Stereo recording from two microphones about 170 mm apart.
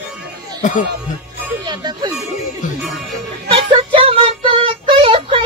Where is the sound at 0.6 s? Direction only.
50° left (ahead or behind).